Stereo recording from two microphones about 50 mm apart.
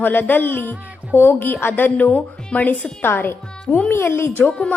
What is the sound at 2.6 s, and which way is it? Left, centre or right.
Speech, left.